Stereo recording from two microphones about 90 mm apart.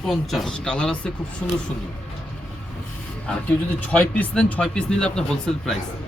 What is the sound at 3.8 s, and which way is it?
Speech, 20° left (ahead or behind).